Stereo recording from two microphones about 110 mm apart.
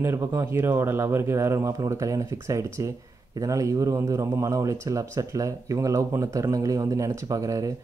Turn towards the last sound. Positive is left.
turn(degrees=-30)  # may be behind; listen again after turning